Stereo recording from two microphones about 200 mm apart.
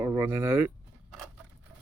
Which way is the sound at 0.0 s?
15° right (ahead or behind).